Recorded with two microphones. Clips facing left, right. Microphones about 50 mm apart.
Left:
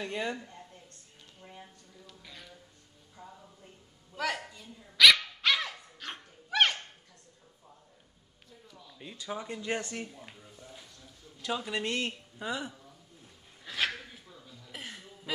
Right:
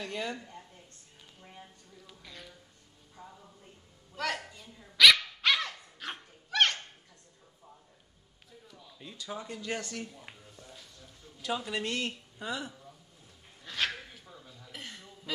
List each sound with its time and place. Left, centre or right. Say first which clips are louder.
0.0 s a man's voice: left 2 dB; centre
2.2 s music: right 2 dB; centre
3.2 s music: left 1 dB; centre
4.1 s a woman's voice: left 1 dB; centre
4.6 s dog: even; centre
6.5 s a sound: left 1 dB; centre
8.5 s music: even; centre
8.9 s a man's voice: left 2 dB; centre
10.6 s a sound: left 2 dB; centre
11.0 s speech: even; centre
13.7 s dog: left 1 dB; centre
14.2 s a sound: right 1 dB; centre
14.7 s a sound: left 2 dB; centre